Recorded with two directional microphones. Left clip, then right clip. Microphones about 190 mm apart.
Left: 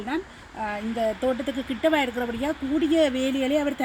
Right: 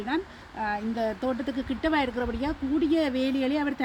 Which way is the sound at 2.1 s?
45° left (ahead or behind).